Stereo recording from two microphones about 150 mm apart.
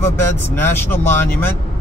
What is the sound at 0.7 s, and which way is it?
Speech, 15° left (ahead or behind).